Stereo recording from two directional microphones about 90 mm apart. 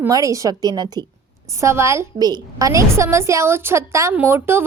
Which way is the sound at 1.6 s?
30° right (ahead or behind).